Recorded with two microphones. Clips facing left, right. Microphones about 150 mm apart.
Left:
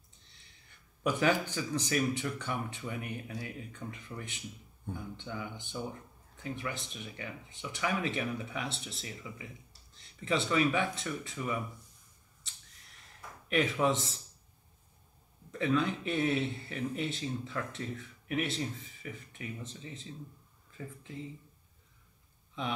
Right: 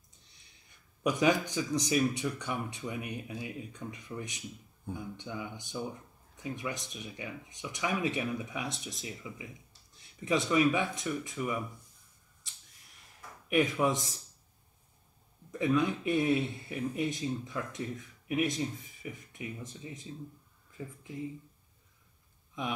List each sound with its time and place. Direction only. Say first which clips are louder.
1.0 s speech: right 2 dB; 15° right (ahead or behind)
13.5 s speech: right 1 dB; 10° right (ahead or behind)
15.5 s speech: right 2 dB; 15° right (ahead or behind)